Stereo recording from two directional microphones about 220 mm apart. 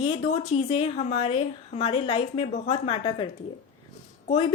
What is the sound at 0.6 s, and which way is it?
A woman's voice, 25° left (ahead or behind).